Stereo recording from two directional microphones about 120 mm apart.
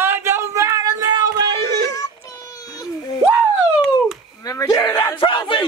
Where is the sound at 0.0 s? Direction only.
20° right (ahead or behind).